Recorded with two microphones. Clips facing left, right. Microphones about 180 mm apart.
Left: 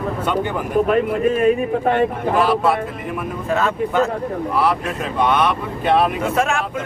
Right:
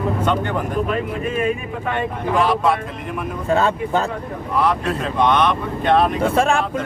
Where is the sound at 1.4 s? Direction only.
40° left (ahead or behind).